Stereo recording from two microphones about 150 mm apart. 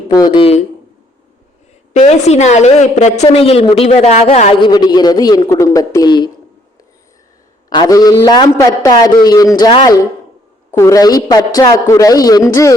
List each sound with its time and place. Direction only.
0.1 s a man's voice: 25° left (ahead or behind)
1.9 s a woman's voice: 50° left (ahead or behind)
4.6 s a man's voice: 30° left (ahead or behind)
7.7 s a man's voice: 25° left (ahead or behind)
10.7 s a man's voice: 20° left (ahead or behind)